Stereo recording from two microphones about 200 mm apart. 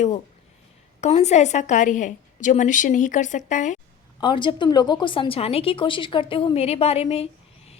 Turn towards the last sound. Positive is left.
turn(degrees=30)  # may be behind; listen again after turning